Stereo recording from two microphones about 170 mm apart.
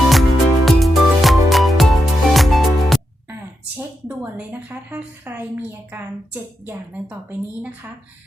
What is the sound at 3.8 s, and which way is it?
A woman's voice, 10° right (ahead or behind).